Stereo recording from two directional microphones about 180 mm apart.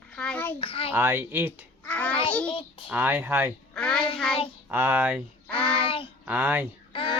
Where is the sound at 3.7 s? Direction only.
5° left (ahead or behind).